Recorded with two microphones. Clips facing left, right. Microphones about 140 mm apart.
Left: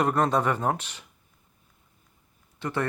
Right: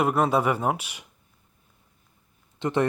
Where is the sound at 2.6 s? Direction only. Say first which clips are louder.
Right 5 dB; 20° right (ahead or behind).